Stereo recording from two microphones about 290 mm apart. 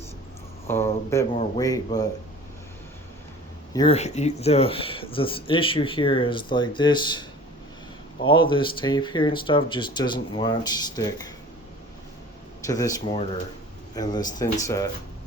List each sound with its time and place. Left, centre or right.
0.7 s speech: centre
3.7 s speech: centre
12.6 s speech: centre